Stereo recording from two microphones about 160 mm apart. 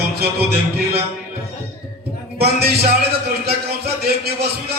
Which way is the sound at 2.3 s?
80° right.